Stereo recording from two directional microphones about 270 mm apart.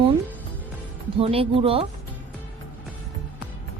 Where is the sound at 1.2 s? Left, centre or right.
Right.